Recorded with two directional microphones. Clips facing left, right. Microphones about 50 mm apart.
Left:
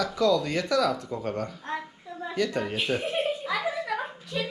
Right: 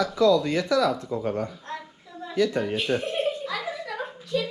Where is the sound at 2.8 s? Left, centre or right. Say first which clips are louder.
Right 1 dB; centre.